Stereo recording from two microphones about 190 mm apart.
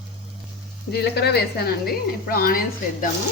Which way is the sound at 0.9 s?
60° left (ahead or behind).